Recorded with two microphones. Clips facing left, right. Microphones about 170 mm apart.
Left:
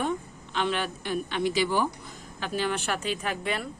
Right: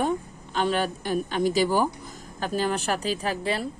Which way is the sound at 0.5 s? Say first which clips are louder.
Right 4 dB; 40° right (ahead or behind).